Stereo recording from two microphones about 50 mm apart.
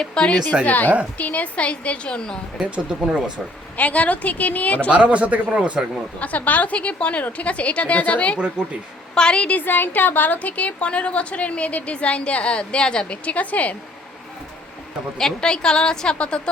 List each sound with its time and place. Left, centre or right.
0.0 s a woman's voice: centre
0.6 s a woman's voice: left; by 2.4 s centre
3.8 s a woman's voice: left
4.9 s a man's voice: right
6.1 s a woman's voice: left
8.6 s a man's voice: centre
9.1 s a woman's voice: centre
9.6 s a woman's voice: left
15.2 s a woman's voice: centre